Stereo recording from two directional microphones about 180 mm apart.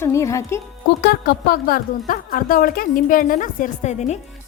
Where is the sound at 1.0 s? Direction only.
60° left (ahead or behind); by 4.2 s 40° left (ahead or behind).